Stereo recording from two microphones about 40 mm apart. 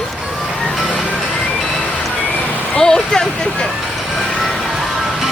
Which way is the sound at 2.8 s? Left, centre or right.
Centre.